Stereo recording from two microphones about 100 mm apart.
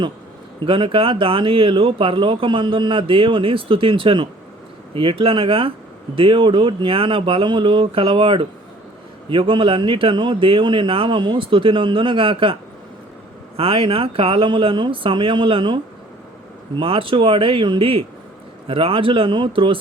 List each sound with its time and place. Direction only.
0.6 s speech: 55° right (ahead or behind)
13.6 s speech: 65° right (ahead or behind)